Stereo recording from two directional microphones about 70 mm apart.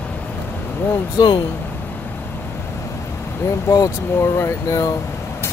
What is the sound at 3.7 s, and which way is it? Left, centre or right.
Speech, left.